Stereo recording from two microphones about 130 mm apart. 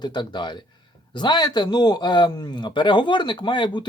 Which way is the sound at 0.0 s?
35° left (ahead or behind).